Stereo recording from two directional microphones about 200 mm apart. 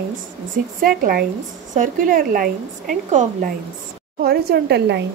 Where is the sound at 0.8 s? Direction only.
45° right (ahead or behind).